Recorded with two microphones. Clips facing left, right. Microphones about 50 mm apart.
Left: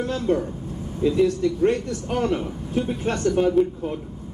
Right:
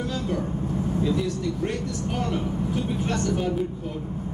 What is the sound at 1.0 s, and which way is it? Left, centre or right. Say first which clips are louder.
Speech: left 11 dB; left.